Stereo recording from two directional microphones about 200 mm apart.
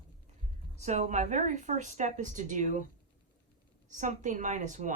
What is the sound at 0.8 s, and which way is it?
Speech, 35° right (ahead or behind).